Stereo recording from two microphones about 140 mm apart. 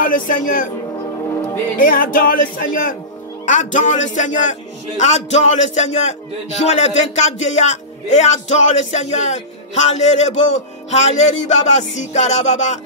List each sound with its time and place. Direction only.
0.0 s speech: 80° left
1.3 s music: 20° left (ahead or behind)
1.8 s speech: 80° left
3.4 s speech: 65° left (ahead or behind)